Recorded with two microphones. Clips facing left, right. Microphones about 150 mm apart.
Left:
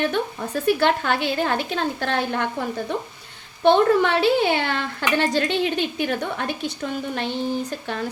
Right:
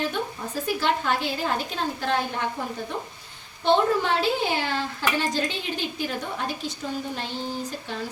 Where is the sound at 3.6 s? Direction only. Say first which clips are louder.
Left 5 dB; 65° left (ahead or behind).